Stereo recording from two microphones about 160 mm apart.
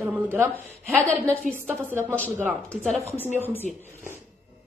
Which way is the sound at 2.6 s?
Centre (ahead or behind).